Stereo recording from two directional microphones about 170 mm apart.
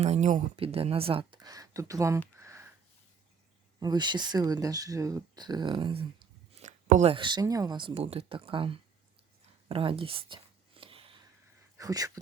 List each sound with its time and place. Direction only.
0.0 s speech: 40° right (ahead or behind)
0.5 s speech: 35° right (ahead or behind); by 2.2 s 15° right (ahead or behind)
2.4 s sniff: 15° right (ahead or behind)
3.8 s speech: 25° right (ahead or behind); by 7.1 s 45° right (ahead or behind)
7.1 s speech: 30° right (ahead or behind)
9.6 s a sound: 30° right (ahead or behind)
11.8 s speech: 20° right (ahead or behind)